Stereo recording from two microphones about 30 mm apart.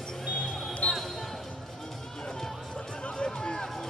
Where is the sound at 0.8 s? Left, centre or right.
Left.